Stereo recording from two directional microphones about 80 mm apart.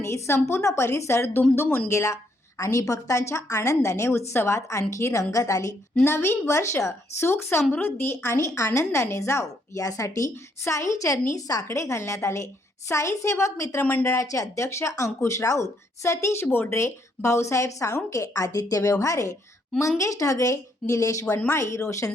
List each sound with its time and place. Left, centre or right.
0.0 s speech: left
6.1 s speech: left
13.8 s speech: left
14.1 s a woman's voice: left